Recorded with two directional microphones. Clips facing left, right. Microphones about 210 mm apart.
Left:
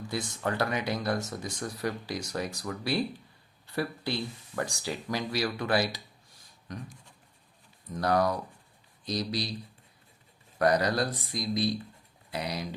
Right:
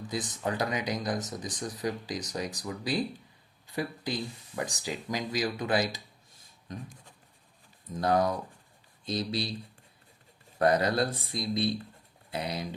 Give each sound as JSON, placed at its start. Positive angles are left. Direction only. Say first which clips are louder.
{"t": 0.1, "sound": "speech", "louder": "even", "side_deg": -20}
{"t": 7.9, "sound": "speech", "louder": "even", "side_deg": -20}
{"t": 10.6, "sound": "speech", "louder": "even", "side_deg": -25}